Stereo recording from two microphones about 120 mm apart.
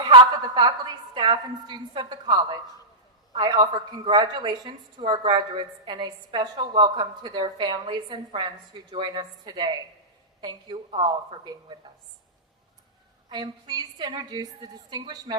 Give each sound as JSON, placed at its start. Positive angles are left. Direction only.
{"t": 0.0, "sound": "a woman's voice", "side_deg": -40}
{"t": 13.3, "sound": "a woman's voice", "side_deg": -35}